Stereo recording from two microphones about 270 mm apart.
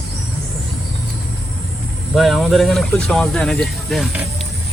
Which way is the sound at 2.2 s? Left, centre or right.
Centre.